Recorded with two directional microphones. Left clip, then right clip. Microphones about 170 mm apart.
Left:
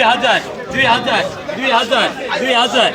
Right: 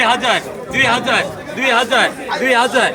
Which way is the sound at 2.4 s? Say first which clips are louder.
Right 1 dB; 25° left (ahead or behind).